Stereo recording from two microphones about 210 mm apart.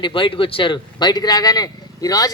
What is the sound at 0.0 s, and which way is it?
Speech, 25° left (ahead or behind).